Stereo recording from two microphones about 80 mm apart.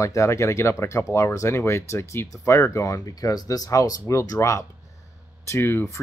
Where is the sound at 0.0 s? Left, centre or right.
Left.